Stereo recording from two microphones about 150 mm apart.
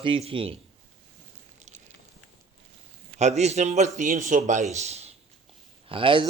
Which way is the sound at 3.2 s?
50° right (ahead or behind).